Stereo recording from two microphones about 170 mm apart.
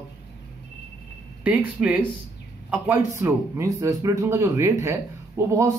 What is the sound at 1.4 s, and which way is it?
Speech, 10° right (ahead or behind).